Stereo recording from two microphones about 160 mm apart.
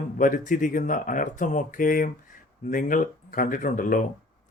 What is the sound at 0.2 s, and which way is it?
Speech, 55° left (ahead or behind).